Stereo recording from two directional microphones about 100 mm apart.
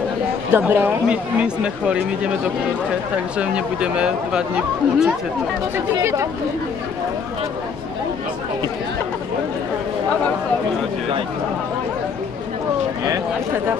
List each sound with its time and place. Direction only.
0.5 s a man's voice: 20° right (ahead or behind)
3.3 s speech: 10° right (ahead or behind)